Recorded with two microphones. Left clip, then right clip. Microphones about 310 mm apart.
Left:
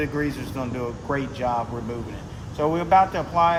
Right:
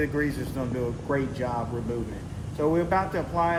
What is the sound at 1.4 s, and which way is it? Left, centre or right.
Speech, left.